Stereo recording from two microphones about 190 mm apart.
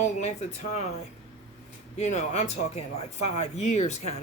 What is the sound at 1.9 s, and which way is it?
Speech, 35° left (ahead or behind).